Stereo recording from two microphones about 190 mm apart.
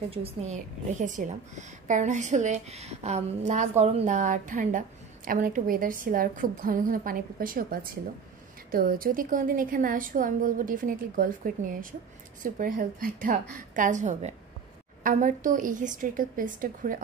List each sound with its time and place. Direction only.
0.1 s a woman's voice: 35° right (ahead or behind)